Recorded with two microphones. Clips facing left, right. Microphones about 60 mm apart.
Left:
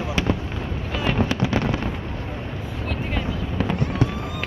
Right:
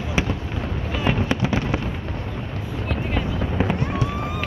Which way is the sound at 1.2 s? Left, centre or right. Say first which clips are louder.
Even; right.